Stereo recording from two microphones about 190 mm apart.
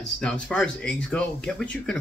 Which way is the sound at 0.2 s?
5° left (ahead or behind).